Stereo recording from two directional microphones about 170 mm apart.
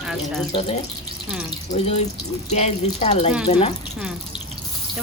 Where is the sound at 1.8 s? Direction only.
40° left (ahead or behind).